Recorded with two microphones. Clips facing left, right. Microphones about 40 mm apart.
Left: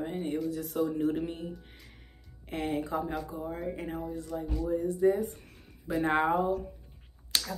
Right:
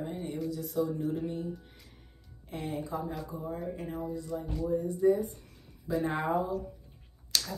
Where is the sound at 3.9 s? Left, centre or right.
Left.